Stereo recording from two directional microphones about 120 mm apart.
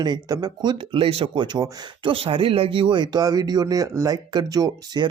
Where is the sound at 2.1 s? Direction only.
50° right (ahead or behind).